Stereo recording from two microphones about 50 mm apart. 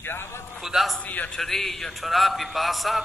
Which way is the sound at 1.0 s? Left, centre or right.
Left.